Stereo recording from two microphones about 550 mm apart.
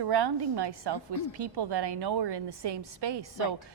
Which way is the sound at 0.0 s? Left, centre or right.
Right.